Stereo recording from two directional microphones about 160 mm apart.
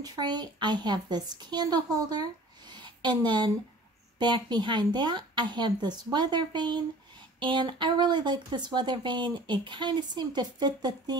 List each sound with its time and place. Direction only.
0.0 s speech: 25° right (ahead or behind)